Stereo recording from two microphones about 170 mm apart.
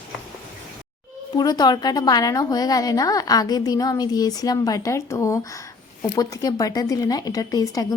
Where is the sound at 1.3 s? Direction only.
25° left (ahead or behind).